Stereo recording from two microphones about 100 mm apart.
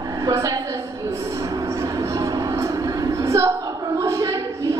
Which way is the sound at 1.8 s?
30° right (ahead or behind).